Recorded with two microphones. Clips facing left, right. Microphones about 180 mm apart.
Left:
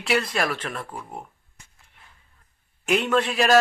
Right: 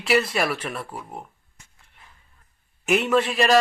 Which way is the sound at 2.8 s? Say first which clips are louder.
Right 1 dB; 5° right (ahead or behind).